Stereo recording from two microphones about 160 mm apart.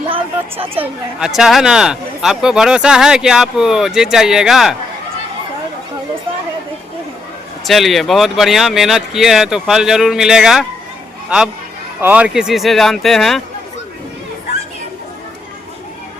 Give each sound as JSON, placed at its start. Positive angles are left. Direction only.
{"t": 0.1, "sound": "a sound", "side_deg": -35}
{"t": 0.8, "sound": "speech", "side_deg": -5}
{"t": 7.6, "sound": "speech", "side_deg": 0}
{"t": 11.9, "sound": "speech", "side_deg": -10}